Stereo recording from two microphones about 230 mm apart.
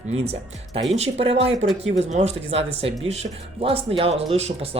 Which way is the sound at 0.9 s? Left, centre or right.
Right.